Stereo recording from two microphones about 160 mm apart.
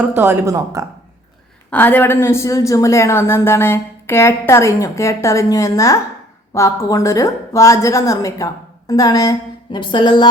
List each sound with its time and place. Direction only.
0.2 s speech: 20° right (ahead or behind)
1.7 s a woman's voice: 10° left (ahead or behind); by 10.2 s 30° left (ahead or behind)